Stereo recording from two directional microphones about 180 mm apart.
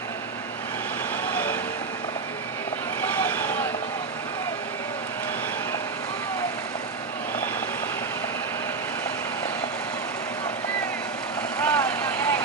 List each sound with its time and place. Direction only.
1.2 s vehicle: 10° left (ahead or behind)
3.3 s vehicle: 10° left (ahead or behind)
11.6 s vehicle: 20° left (ahead or behind)